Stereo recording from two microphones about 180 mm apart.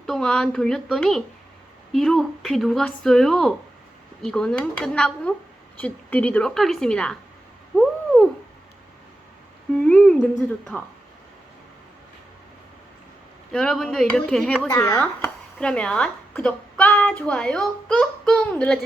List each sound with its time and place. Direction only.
0.0 s speech: 5° left (ahead or behind)
7.8 s owl: centre (ahead or behind)
9.8 s humming: 5° left (ahead or behind)
10.7 s speech: 5° left (ahead or behind)
13.5 s speech: 5° left (ahead or behind)
14.7 s speech: 20° left (ahead or behind)
14.9 s speech: 5° left (ahead or behind)